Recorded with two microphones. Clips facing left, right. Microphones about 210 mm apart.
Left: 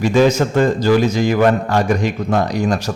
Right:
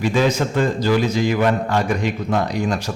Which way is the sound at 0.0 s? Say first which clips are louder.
Left 5 dB; 45° left (ahead or behind).